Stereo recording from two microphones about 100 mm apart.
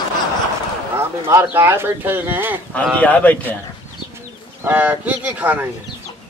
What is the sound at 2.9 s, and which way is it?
Speech, 15° left (ahead or behind).